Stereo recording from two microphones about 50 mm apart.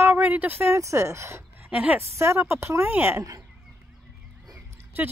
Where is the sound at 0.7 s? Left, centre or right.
Right.